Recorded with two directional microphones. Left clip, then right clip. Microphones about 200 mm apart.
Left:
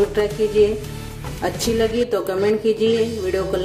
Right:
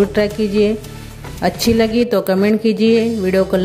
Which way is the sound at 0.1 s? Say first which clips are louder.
Right 2 dB; 40° right (ahead or behind).